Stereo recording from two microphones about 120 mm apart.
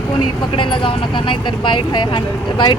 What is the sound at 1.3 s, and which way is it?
Speech, 45° left (ahead or behind).